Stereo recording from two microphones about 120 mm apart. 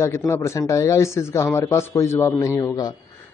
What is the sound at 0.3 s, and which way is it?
A man's voice, 25° left (ahead or behind).